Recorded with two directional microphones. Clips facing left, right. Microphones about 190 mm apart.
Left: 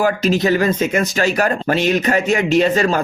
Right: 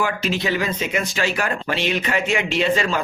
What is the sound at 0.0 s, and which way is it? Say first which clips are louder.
Speech: left 7 dB; 40° left (ahead or behind).